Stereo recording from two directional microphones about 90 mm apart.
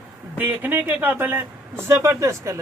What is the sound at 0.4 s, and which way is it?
Speech, 25° right (ahead or behind).